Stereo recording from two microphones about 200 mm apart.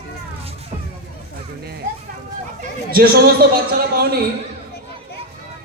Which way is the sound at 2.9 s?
50° right (ahead or behind).